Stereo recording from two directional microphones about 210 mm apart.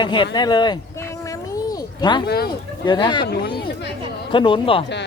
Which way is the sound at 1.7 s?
20° left (ahead or behind).